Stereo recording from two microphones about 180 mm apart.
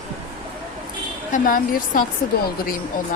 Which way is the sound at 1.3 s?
50° left (ahead or behind).